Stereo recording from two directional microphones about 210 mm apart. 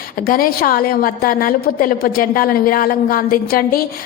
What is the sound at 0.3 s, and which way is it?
A woman's voice, 45° left (ahead or behind).